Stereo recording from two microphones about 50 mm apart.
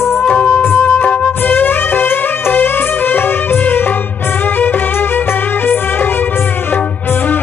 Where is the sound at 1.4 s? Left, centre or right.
Left.